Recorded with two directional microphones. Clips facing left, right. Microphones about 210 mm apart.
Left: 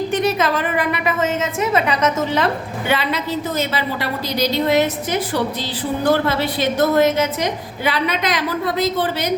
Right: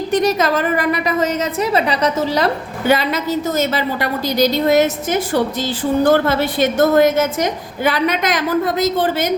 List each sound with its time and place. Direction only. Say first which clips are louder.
0.1 s a woman's voice: right 6 dB; 40° right (ahead or behind)